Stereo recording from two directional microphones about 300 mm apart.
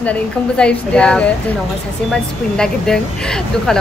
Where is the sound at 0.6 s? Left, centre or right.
Centre.